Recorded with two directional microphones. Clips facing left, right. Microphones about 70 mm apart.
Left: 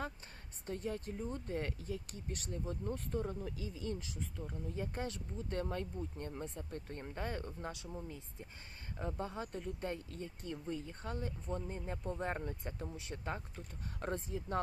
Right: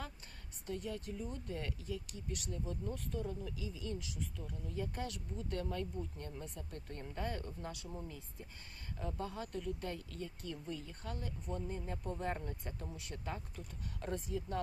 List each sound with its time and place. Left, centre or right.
0.7 s speech: left